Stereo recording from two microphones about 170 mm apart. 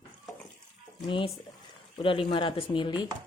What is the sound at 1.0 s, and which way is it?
Speech, 30° left (ahead or behind).